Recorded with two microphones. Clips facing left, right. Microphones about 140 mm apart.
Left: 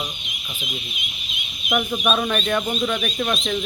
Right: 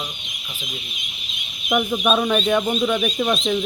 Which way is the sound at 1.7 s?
5° right (ahead or behind).